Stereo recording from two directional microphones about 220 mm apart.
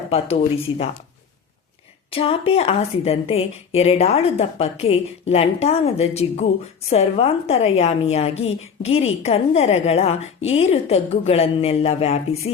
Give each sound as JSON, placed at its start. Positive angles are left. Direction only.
{"t": 0.1, "sound": "a woman's voice", "side_deg": 25}
{"t": 2.0, "sound": "a woman's voice", "side_deg": 25}